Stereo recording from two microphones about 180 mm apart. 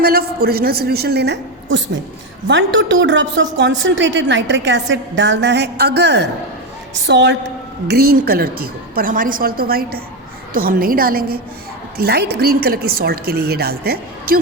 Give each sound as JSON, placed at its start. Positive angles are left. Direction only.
{"t": 0.0, "sound": "speech", "side_deg": -60}
{"t": 2.5, "sound": "a woman's voice", "side_deg": -90}
{"t": 6.9, "sound": "a woman's voice", "side_deg": -80}
{"t": 7.9, "sound": "a woman's voice", "side_deg": -60}